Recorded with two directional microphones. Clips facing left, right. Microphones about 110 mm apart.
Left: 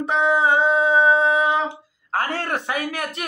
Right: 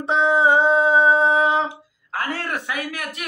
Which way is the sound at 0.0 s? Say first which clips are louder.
Right 1 dB; 25° right (ahead or behind).